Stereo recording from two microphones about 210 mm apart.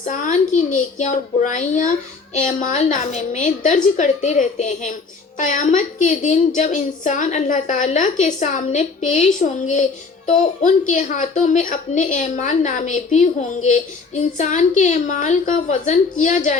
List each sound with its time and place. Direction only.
0.1 s a woman's voice: 35° left (ahead or behind)